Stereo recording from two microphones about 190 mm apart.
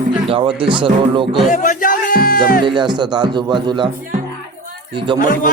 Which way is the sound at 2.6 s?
25° right (ahead or behind).